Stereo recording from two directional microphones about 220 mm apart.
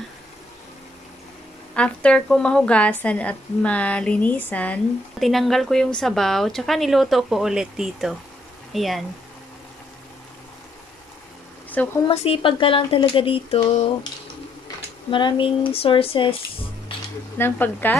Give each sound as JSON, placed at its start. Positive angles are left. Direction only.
{"t": 1.8, "sound": "speech", "side_deg": 5}
{"t": 11.8, "sound": "speech", "side_deg": 5}
{"t": 12.1, "sound": "speech", "side_deg": 25}
{"t": 15.0, "sound": "speech", "side_deg": 20}
{"t": 17.4, "sound": "speech", "side_deg": 10}